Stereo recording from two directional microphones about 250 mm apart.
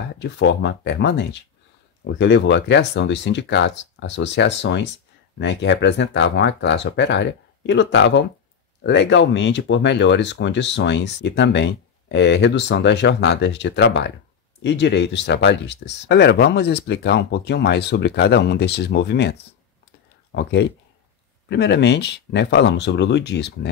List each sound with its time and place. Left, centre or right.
0.1 s speech: left
20.3 s speech: left